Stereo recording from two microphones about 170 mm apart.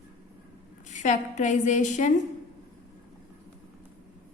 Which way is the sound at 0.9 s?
45° left (ahead or behind).